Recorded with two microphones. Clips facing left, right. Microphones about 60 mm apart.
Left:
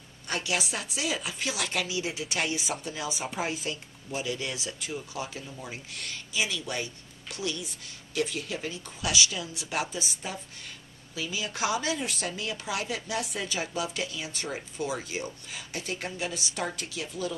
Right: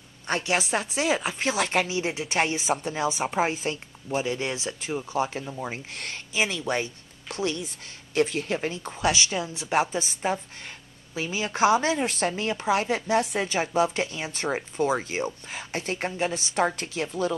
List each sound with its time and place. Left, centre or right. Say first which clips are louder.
0.3 s speech: right 6 dB; right